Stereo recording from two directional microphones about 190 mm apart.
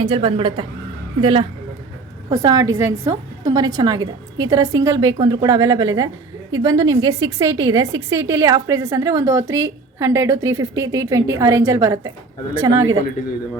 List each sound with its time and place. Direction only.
0.0 s a woman's voice: 25° right (ahead or behind)